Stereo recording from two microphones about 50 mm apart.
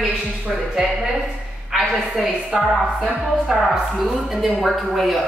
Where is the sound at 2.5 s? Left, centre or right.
Centre.